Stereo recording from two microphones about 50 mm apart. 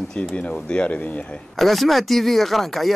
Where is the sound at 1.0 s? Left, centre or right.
Left.